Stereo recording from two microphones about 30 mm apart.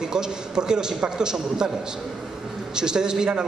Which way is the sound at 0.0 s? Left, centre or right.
Right.